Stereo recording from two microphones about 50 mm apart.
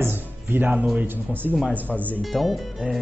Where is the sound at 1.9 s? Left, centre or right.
Left.